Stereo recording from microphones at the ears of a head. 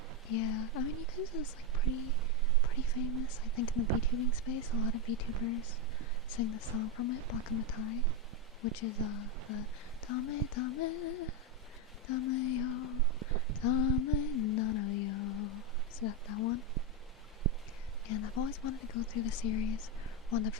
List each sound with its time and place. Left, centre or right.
0.3 s speech: left
13.6 s a sound: left
18.1 s speech: left